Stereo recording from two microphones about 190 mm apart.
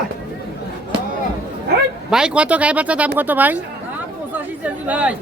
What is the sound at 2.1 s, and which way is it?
Speech, 5° right (ahead or behind).